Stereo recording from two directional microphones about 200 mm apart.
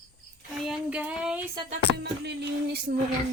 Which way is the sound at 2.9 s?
50° right (ahead or behind).